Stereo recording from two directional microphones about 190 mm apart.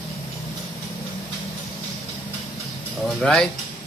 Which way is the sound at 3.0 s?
Centre (ahead or behind).